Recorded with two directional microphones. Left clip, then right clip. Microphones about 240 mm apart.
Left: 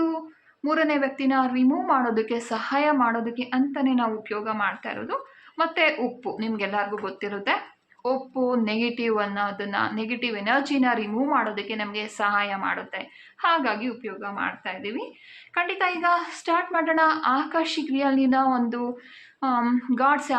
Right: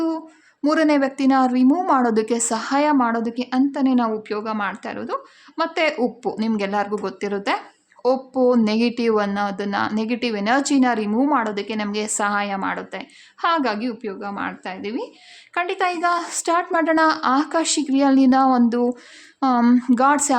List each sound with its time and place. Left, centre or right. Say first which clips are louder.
0.6 s speech: right 5 dB; right